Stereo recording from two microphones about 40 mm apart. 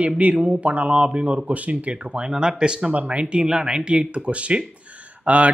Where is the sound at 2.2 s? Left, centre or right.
Centre.